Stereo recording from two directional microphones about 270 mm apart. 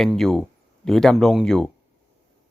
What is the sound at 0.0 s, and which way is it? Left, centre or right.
Speech, centre.